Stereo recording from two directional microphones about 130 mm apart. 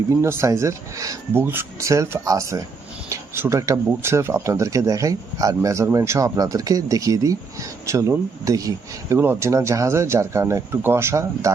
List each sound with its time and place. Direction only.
0.2 s speech: 20° right (ahead or behind)